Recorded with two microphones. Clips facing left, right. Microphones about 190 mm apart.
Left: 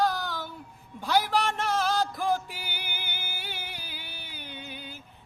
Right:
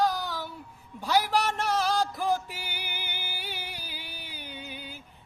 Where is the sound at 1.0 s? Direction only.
10° right (ahead or behind).